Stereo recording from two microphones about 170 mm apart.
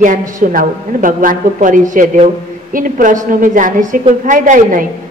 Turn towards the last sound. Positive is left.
turn(degrees=-50)  # may be behind; listen again after turning